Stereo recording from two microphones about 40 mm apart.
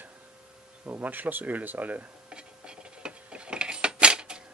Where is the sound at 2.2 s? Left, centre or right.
Right.